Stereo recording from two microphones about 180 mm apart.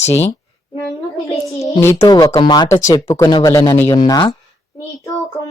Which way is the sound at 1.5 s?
20° left (ahead or behind).